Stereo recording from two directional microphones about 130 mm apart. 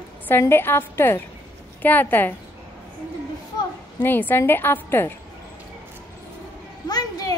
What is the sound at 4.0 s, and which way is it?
A woman's voice, 15° left (ahead or behind).